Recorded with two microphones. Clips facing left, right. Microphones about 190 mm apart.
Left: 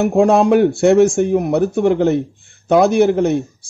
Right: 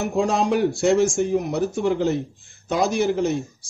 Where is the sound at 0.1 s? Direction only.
60° left (ahead or behind).